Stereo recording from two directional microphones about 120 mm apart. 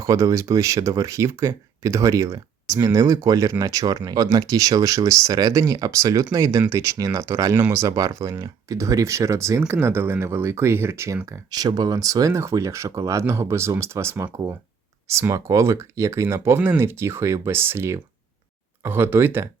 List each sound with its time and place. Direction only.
0.0 s speech: 25° right (ahead or behind)